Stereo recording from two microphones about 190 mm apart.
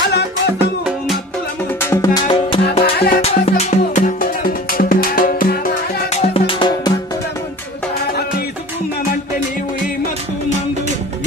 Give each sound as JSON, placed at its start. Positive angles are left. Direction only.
{"t": 0.6, "sound": "music", "side_deg": -5}
{"t": 1.8, "sound": "music", "side_deg": 15}
{"t": 2.2, "sound": "music", "side_deg": 30}
{"t": 6.1, "sound": "music", "side_deg": 30}